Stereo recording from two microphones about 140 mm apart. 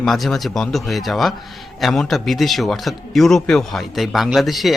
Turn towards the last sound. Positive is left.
turn(degrees=0)  # may be behind; listen again after turning